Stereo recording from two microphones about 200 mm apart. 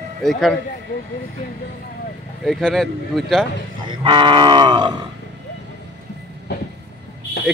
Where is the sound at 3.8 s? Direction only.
25° right (ahead or behind).